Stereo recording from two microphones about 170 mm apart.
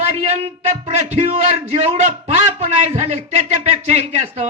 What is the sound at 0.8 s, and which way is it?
A man's voice, 40° right (ahead or behind).